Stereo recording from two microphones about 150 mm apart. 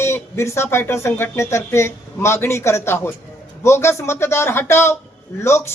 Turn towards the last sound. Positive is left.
turn(degrees=15)  # may be behind; listen again after turning